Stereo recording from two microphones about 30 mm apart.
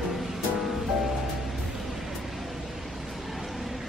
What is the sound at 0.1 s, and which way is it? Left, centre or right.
Music, centre.